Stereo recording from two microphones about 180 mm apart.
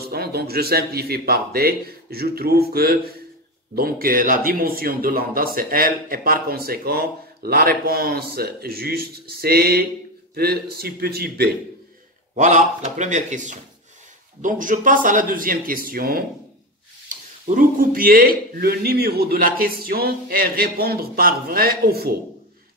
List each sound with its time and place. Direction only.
0.0 s speech: 60° right (ahead or behind)
12.4 s speech: 40° right (ahead or behind); by 22.1 s 55° right (ahead or behind)